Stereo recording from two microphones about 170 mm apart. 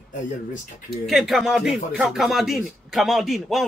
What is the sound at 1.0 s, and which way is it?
Speech, centre (ahead or behind).